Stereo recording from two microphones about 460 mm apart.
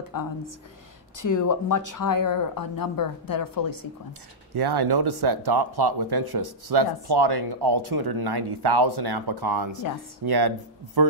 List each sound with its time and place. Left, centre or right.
0.1 s speech: left
4.6 s speech: right